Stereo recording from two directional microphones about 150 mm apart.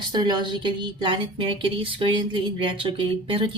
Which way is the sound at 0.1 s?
30° right (ahead or behind).